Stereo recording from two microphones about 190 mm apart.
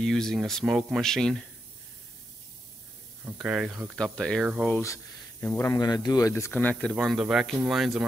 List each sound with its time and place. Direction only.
0.0 s speech: centre (ahead or behind)
3.3 s speech: 5° right (ahead or behind)